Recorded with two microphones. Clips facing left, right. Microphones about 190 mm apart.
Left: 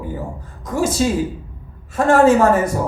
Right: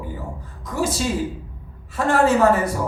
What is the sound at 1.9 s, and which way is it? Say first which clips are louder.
Speech: left 6 dB; 45° left (ahead or behind).